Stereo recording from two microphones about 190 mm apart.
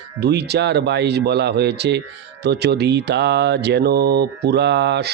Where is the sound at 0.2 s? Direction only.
60° right (ahead or behind).